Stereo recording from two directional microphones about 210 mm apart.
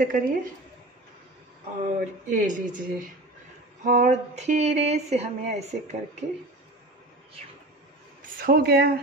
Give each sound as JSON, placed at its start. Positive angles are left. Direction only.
{"t": 0.0, "sound": "speech", "side_deg": -40}
{"t": 2.2, "sound": "speech", "side_deg": -40}
{"t": 8.4, "sound": "speech", "side_deg": -45}